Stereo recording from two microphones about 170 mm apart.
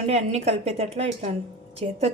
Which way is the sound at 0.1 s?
40° right (ahead or behind).